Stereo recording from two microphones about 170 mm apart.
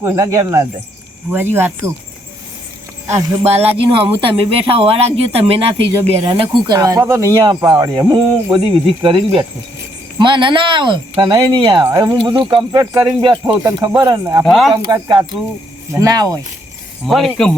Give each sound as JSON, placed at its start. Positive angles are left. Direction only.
{"t": 0.0, "sound": "speech", "side_deg": -20}
{"t": 3.1, "sound": "speech", "side_deg": -15}
{"t": 4.2, "sound": "speech", "side_deg": -35}
{"t": 14.4, "sound": "speech", "side_deg": 0}
{"t": 14.8, "sound": "speech", "side_deg": -20}
{"t": 17.1, "sound": "speech", "side_deg": 0}